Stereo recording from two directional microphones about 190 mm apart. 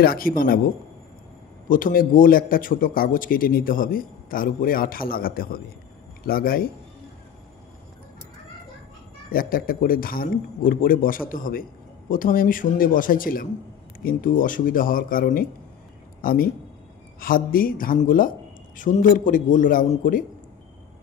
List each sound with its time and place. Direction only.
0.0 s a man's voice: 50° left (ahead or behind)
1.7 s a man's voice: 45° left (ahead or behind)
9.3 s a man's voice: 50° left (ahead or behind)